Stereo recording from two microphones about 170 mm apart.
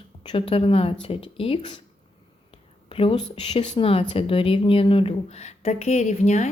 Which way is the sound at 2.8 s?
35° left (ahead or behind).